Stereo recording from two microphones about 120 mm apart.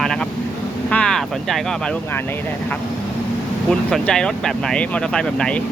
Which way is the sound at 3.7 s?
5° left (ahead or behind).